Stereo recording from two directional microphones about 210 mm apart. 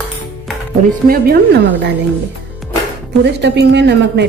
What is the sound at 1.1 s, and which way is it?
Speech, 50° right (ahead or behind).